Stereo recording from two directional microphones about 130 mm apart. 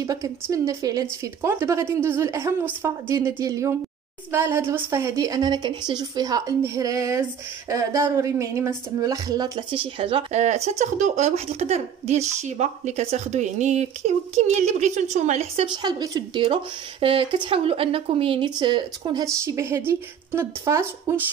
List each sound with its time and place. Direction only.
0.0 s a woman's voice: 25° right (ahead or behind); by 10.2 s 45° right (ahead or behind)
10.3 s speech: 60° right (ahead or behind)
15.6 s speech: 35° right (ahead or behind)
17.0 s speech: 40° right (ahead or behind)
19.2 s a woman's voice: 25° right (ahead or behind)